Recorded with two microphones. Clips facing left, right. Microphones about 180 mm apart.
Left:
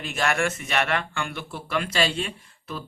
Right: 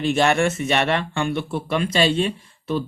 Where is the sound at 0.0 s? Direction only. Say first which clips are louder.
Right 7 dB; 30° right (ahead or behind).